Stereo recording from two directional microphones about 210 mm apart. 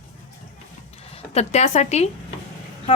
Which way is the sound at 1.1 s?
30° left (ahead or behind).